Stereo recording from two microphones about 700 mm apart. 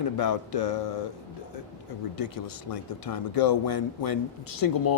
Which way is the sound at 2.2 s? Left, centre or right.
Left.